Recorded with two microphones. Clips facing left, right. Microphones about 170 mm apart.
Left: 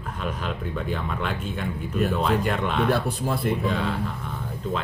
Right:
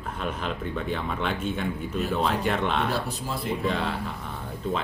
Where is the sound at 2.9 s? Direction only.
55° left (ahead or behind).